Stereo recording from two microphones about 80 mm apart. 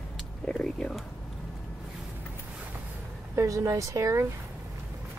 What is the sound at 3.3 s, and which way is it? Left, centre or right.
Speech, right.